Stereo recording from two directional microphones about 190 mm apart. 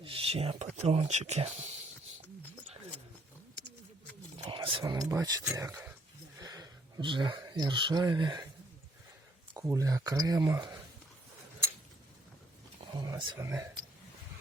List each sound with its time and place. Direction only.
0.0 s speech: 30° right (ahead or behind)
4.4 s a sound: 25° right (ahead or behind)
5.5 s speech: 15° right (ahead or behind)
9.6 s speech: 15° right (ahead or behind)
13.0 s speech: 20° right (ahead or behind)